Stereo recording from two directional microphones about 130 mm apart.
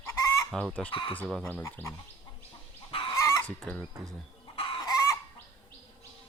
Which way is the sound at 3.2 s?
20° left (ahead or behind).